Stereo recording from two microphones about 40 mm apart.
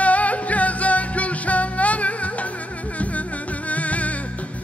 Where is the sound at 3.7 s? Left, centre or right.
Left.